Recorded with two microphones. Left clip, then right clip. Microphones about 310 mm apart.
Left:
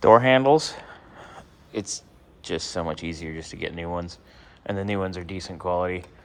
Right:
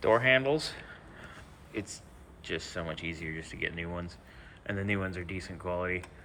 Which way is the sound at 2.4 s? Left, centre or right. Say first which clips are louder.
Left 8 dB; centre.